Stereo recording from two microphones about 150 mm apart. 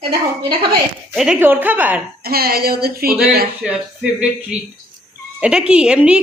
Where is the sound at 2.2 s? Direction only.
90° right.